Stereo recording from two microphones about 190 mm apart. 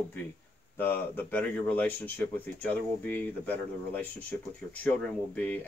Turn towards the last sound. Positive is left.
turn(degrees=10)  # may be behind; listen again after turning